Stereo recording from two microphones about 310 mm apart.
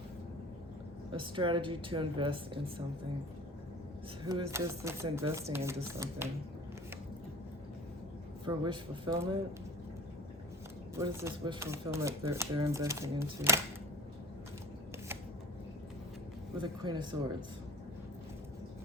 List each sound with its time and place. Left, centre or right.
1.1 s speech: centre
4.3 s speech: centre
8.4 s speech: centre
10.9 s speech: centre
16.6 s speech: centre